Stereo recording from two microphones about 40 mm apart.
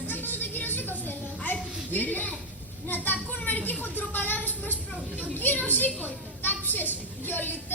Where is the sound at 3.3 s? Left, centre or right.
Left.